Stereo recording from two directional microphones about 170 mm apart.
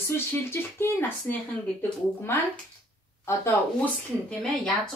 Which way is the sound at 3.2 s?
15° left (ahead or behind).